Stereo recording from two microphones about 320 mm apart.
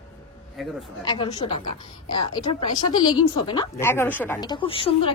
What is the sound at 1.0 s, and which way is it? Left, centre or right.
A woman's voice, centre.